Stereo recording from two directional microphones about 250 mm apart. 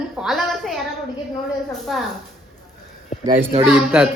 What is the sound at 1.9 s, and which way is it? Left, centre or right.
Speech, centre.